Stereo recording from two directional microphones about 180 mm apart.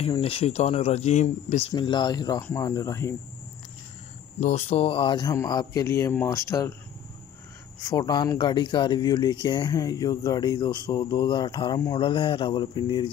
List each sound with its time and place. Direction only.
0.0 s speech: 35° left (ahead or behind)
1.7 s speech: 25° left (ahead or behind)
4.4 s speech: 40° left (ahead or behind); by 6.7 s 15° left (ahead or behind)
7.9 s speech: 20° left (ahead or behind)